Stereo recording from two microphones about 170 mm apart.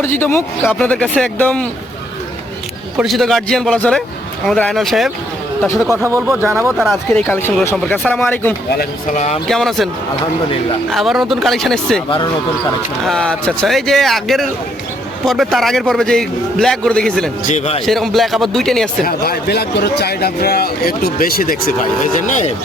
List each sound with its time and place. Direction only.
0.0 s speech: 15° left (ahead or behind)
3.0 s a man's voice: centre (ahead or behind)
5.9 s speech: 15° right (ahead or behind)
6.7 s a man's voice: centre (ahead or behind)
8.8 s speech: 45° left (ahead or behind)
9.5 s a man's voice: centre (ahead or behind)
10.9 s a man's voice: centre (ahead or behind)
13.1 s a man's voice: 5° left (ahead or behind)
17.5 s a man's voice: 40° left (ahead or behind)
17.8 s a man's voice: centre (ahead or behind)
19.0 s speech: 65° left (ahead or behind)
22.0 s speech: 45° left (ahead or behind)